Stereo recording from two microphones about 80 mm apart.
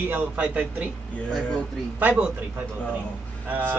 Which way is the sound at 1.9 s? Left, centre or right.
Right.